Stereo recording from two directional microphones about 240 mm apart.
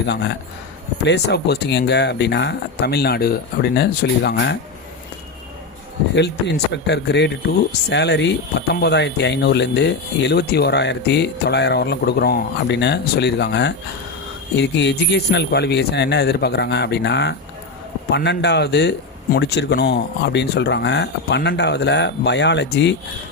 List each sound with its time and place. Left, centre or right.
0.0 s speech: left
6.8 s speech: left